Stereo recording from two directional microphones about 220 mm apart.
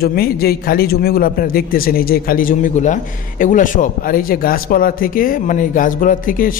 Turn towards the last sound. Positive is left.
turn(degrees=40)  # may be behind; listen again after turning